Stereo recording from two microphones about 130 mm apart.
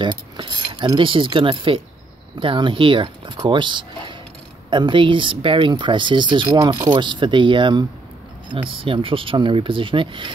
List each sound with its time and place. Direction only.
0.0 s keys jangling: 35° right (ahead or behind)
0.9 s speech: 40° right (ahead or behind)